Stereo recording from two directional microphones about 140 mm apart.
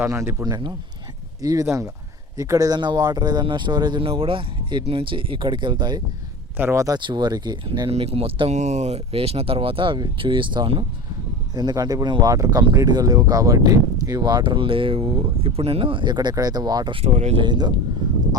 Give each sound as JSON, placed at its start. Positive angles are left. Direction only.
{"t": 0.0, "sound": "speech", "side_deg": -20}
{"t": 6.6, "sound": "speech", "side_deg": -20}
{"t": 7.9, "sound": "speech", "side_deg": -45}
{"t": 17.4, "sound": "speech", "side_deg": -30}